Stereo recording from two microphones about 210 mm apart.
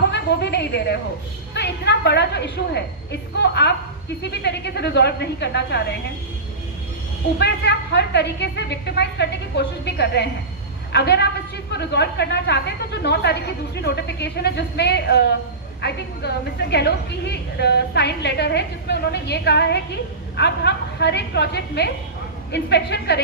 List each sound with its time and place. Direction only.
0.1 s a sound: 55° left (ahead or behind)
1.5 s a woman's voice: 55° left (ahead or behind)
7.3 s a woman's voice: 55° left (ahead or behind)